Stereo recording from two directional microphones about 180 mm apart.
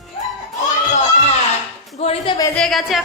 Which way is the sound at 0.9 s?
40° left (ahead or behind).